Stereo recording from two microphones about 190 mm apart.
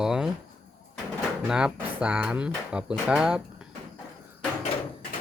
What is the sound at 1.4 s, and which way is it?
Speech, 5° right (ahead or behind).